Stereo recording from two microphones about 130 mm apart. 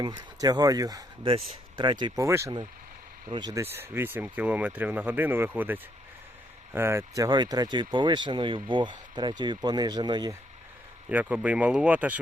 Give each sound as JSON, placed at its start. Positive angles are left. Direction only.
{"t": 0.0, "sound": "speech", "side_deg": -30}
{"t": 1.2, "sound": "speech", "side_deg": -45}
{"t": 1.8, "sound": "speech", "side_deg": -35}
{"t": 2.1, "sound": "speech", "side_deg": -20}
{"t": 3.2, "sound": "speech", "side_deg": -35}
{"t": 3.6, "sound": "speech", "side_deg": -20}
{"t": 11.1, "sound": "speech", "side_deg": -10}